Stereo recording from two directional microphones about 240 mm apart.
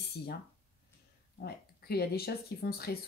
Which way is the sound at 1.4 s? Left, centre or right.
Left.